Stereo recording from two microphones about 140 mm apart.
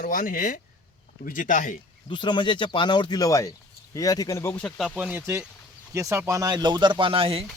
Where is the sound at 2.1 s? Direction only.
35° left (ahead or behind).